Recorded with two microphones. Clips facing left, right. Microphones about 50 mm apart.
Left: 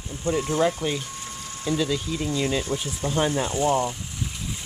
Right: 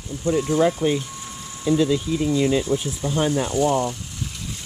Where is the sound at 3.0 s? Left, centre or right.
Centre.